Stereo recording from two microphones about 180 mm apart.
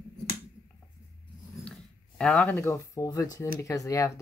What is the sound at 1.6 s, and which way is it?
Speech, 5° left (ahead or behind).